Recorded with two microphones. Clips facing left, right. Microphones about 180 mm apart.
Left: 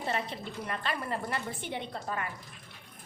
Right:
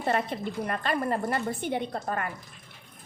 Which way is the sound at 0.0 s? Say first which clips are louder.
Right 6 dB; 55° right (ahead or behind).